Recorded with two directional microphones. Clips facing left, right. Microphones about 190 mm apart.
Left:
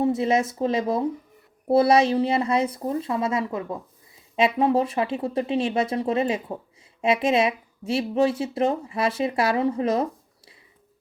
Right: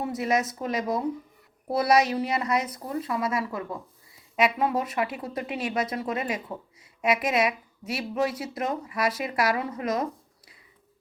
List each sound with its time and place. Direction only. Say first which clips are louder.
0.0 s speech: left 5 dB; 25° left (ahead or behind)